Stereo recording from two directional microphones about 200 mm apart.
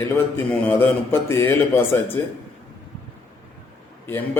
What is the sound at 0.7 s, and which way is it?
Speech, 10° left (ahead or behind).